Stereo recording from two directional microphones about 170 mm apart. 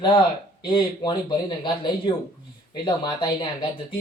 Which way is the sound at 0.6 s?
25° left (ahead or behind).